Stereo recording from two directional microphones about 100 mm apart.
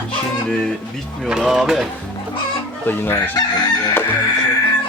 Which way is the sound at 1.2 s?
5° right (ahead or behind).